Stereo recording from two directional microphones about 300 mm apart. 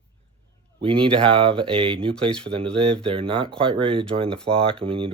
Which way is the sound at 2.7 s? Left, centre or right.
Centre.